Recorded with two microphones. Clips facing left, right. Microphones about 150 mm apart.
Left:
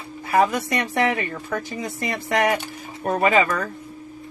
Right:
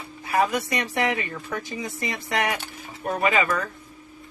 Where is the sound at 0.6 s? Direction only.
50° left (ahead or behind).